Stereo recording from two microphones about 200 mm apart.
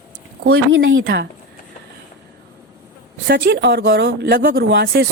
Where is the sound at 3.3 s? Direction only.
55° right (ahead or behind).